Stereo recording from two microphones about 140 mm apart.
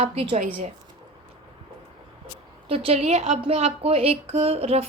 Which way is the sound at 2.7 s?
45° right (ahead or behind).